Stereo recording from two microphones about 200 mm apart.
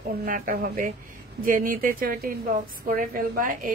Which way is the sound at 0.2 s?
45° right (ahead or behind).